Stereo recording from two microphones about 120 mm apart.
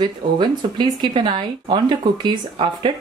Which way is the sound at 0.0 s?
40° right (ahead or behind).